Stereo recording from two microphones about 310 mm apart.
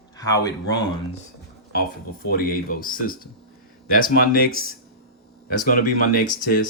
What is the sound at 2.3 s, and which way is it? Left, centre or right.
Speech, left.